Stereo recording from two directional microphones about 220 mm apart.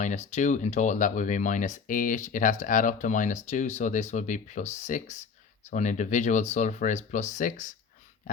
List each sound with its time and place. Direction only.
0.0 s speech: 30° left (ahead or behind)